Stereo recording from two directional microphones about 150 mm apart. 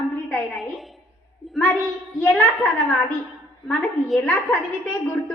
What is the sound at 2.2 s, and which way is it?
Speech, 10° left (ahead or behind).